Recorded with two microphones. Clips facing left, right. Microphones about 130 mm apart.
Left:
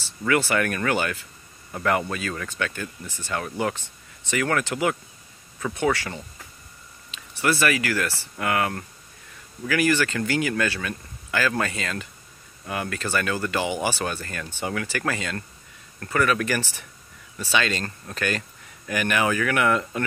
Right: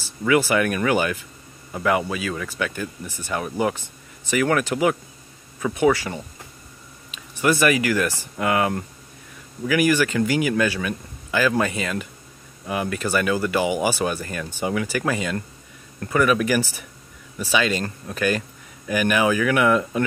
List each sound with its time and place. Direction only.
0.3 s speech: 15° right (ahead or behind)